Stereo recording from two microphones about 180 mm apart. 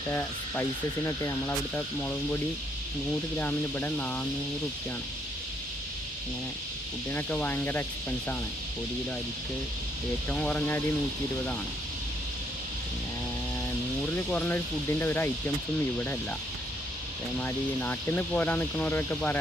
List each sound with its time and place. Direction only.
0.1 s speech: 10° left (ahead or behind)
3.3 s speech: 10° left (ahead or behind)
7.1 s speech: 10° left (ahead or behind)
10.2 s speech: 5° left (ahead or behind)
14.2 s speech: 10° left (ahead or behind)
17.4 s speech: 10° left (ahead or behind)